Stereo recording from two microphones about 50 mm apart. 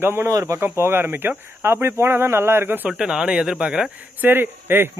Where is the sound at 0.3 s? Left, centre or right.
Right.